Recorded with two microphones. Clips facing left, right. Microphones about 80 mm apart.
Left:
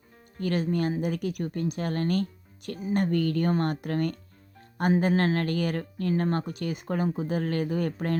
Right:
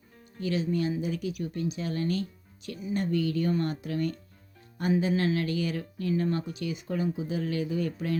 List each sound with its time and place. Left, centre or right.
0.3 s speech: left